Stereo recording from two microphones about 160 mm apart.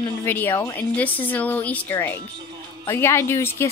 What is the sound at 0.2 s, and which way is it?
A woman's voice, 15° left (ahead or behind).